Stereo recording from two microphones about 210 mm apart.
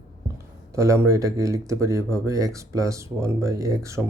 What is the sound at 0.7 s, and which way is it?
Speech, 15° right (ahead or behind).